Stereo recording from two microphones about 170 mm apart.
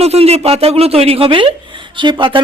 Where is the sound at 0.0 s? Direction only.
35° right (ahead or behind).